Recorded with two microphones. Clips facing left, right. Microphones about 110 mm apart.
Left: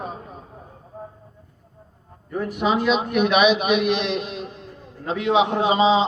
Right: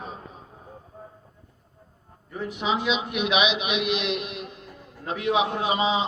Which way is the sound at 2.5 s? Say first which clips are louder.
Left 5 dB; 50° left (ahead or behind).